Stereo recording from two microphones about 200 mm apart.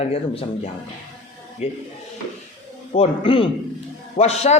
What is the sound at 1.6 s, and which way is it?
Speech, 30° left (ahead or behind).